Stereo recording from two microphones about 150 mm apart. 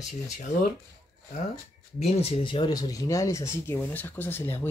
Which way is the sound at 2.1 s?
40° left (ahead or behind).